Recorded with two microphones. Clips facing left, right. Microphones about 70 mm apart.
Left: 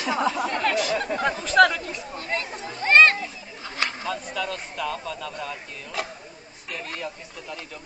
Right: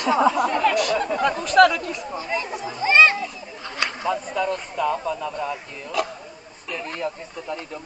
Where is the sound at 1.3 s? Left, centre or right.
Right.